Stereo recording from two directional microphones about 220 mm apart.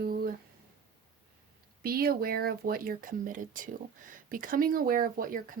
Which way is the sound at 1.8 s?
45° right (ahead or behind).